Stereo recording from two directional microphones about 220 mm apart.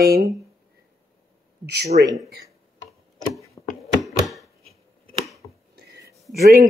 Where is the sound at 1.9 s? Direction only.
35° right (ahead or behind).